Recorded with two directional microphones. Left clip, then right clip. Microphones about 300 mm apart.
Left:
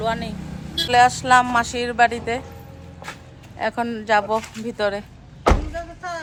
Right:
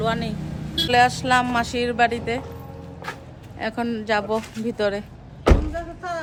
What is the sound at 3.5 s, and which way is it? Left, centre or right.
A woman's voice, centre.